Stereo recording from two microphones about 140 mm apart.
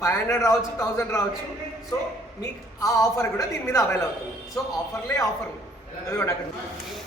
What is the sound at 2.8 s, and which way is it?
A man's voice, 25° left (ahead or behind).